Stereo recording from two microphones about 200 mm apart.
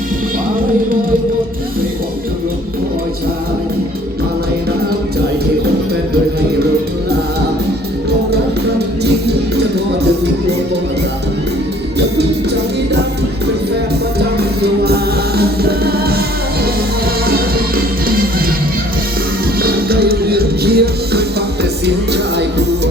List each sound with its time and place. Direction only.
14.3 s music: 55° right (ahead or behind)
17.2 s music: 50° right (ahead or behind)
19.5 s music: 50° right (ahead or behind)